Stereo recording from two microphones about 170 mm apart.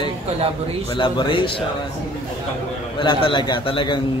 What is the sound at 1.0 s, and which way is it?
Speech, 30° left (ahead or behind).